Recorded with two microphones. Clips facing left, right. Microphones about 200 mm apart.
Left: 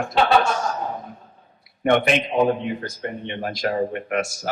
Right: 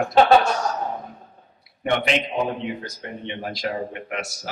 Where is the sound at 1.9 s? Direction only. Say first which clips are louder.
Left 4 dB; 50° left (ahead or behind).